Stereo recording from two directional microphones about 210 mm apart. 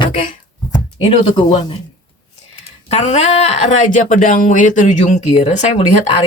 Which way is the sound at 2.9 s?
35° left (ahead or behind).